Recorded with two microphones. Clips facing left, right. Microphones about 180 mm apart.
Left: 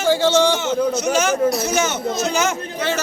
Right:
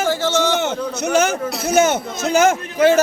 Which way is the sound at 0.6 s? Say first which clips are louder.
Left 3 dB; 60° right (ahead or behind).